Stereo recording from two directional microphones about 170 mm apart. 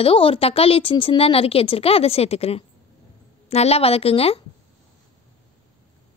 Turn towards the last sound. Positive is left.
turn(degrees=35)  # may be behind; listen again after turning